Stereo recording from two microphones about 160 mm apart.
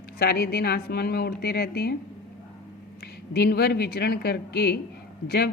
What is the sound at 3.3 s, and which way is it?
Speech, 90° left.